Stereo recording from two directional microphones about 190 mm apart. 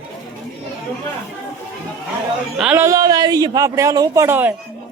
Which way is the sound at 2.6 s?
10° right (ahead or behind).